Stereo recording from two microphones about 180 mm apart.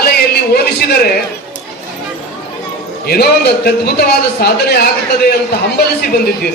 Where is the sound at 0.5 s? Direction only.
60° left (ahead or behind).